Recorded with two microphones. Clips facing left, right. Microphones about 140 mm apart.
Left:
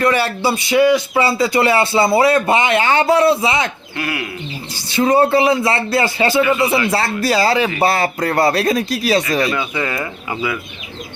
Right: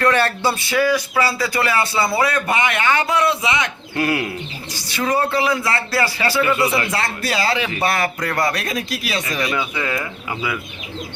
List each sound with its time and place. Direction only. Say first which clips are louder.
0.0 s a man's voice: left 1 dB; 10° left (ahead or behind); by 3.7 s 30° left (ahead or behind)
3.9 s bird: right 5 dB; 35° right (ahead or behind)
4.7 s a man's voice: left 6 dB; 25° left (ahead or behind)
9.5 s speech: left 2 dB; 5° right (ahead or behind)